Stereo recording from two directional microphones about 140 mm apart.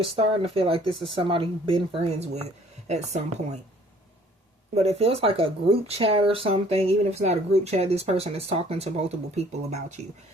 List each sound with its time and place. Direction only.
0.0 s speech: 45° right (ahead or behind)
4.7 s speech: 50° right (ahead or behind)